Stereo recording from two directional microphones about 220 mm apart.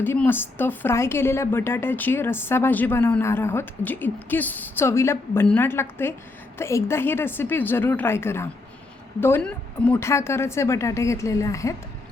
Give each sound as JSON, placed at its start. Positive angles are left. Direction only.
{"t": 0.0, "sound": "a woman's voice", "side_deg": 10}